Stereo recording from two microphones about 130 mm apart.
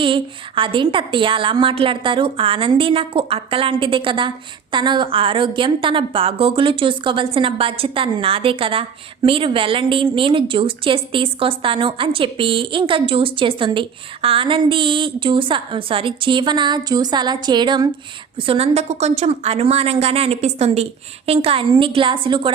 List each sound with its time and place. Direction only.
0.0 s a woman's voice: 40° right (ahead or behind)
18.3 s a woman's voice: 45° right (ahead or behind)